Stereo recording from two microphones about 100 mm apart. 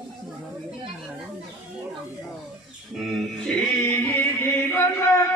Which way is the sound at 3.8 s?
15° left (ahead or behind).